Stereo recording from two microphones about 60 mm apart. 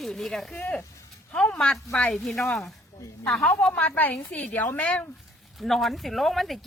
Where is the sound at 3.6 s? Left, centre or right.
Left.